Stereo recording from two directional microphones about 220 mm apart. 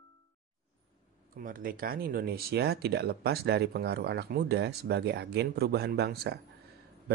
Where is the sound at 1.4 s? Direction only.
40° right (ahead or behind).